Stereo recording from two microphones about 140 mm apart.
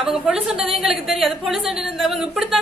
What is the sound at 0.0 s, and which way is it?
Speech, 5° right (ahead or behind).